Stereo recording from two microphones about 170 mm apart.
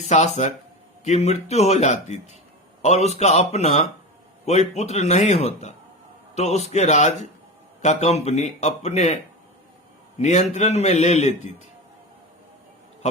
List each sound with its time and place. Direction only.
0.0 s a man's voice: 40° left (ahead or behind)
10.2 s a man's voice: 40° left (ahead or behind)